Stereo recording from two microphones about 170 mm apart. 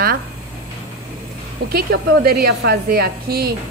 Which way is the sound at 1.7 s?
65° right (ahead or behind).